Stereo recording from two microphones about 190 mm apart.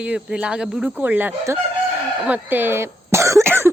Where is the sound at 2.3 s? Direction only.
10° right (ahead or behind).